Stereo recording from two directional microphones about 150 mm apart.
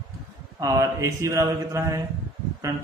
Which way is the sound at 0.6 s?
20° right (ahead or behind).